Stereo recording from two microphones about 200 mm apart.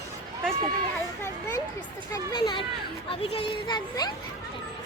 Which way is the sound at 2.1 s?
20° left (ahead or behind).